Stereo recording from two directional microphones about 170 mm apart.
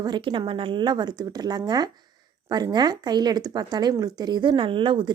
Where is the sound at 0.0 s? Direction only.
25° right (ahead or behind).